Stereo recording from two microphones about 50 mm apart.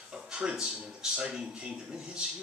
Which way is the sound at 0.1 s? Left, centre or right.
Centre.